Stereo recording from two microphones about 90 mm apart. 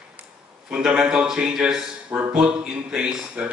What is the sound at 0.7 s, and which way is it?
Speech, 10° right (ahead or behind).